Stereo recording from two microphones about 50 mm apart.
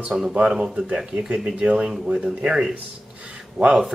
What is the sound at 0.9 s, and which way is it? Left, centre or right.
Speech, right.